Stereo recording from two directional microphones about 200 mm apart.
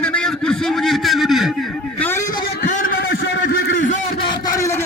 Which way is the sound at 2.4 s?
40° left (ahead or behind).